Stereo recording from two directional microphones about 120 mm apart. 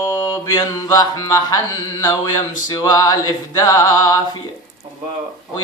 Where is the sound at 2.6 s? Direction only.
35° left (ahead or behind).